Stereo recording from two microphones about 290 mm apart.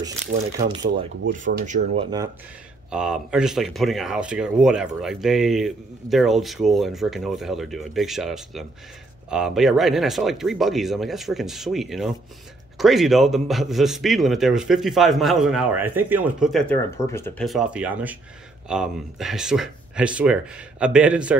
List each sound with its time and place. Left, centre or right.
1.3 s speech: right
2.9 s speech: centre